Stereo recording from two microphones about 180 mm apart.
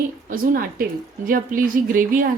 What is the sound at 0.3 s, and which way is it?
Speech, 50° right (ahead or behind).